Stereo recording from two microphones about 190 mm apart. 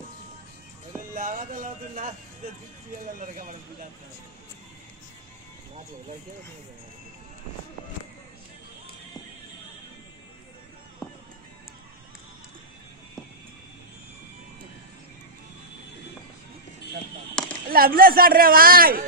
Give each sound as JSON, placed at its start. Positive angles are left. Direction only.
{"t": 1.1, "sound": "a man's voice", "side_deg": -45}
{"t": 3.2, "sound": "a man's voice", "side_deg": -45}
{"t": 17.6, "sound": "a man's voice", "side_deg": -50}